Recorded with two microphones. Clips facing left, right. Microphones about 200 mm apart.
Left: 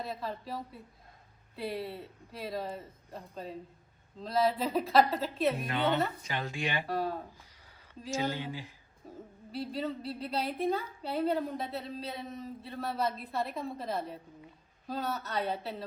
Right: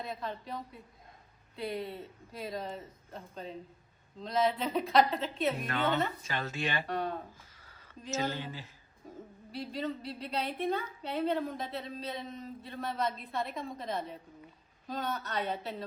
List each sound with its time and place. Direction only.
0.1 s speech: 5° left (ahead or behind)
5.6 s speech: 15° left (ahead or behind)